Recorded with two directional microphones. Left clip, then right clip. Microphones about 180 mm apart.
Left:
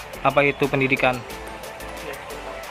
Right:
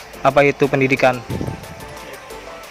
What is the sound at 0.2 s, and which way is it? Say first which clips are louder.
Speech: right 5 dB; 40° right (ahead or behind).